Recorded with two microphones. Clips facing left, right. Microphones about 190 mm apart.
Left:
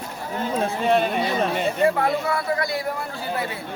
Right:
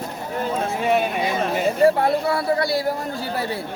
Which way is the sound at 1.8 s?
35° right (ahead or behind).